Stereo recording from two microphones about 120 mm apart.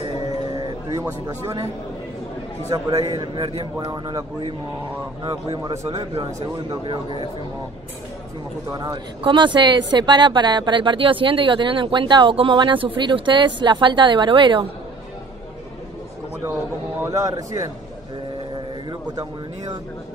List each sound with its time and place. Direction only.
0.5 s a sound: 30° right (ahead or behind)
2.7 s a man's voice: 30° right (ahead or behind)
3.1 s a man's voice: 45° right (ahead or behind)
6.8 s a man's voice: 45° right (ahead or behind)
8.7 s speech: 40° right (ahead or behind)
17.0 s a man's voice: 30° right (ahead or behind)
18.9 s speech: 35° right (ahead or behind)